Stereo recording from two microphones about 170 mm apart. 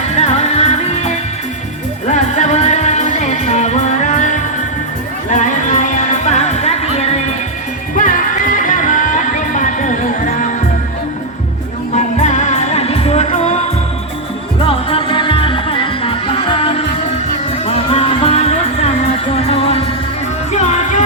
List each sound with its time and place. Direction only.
0.2 s music: 40° left (ahead or behind)
7.9 s music: 50° left (ahead or behind)
11.9 s music: 45° left (ahead or behind)
14.6 s music: 35° left (ahead or behind)